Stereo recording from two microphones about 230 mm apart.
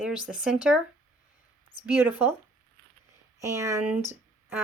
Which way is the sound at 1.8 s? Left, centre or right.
Centre.